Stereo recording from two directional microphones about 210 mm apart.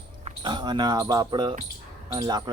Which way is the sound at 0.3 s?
20° right (ahead or behind).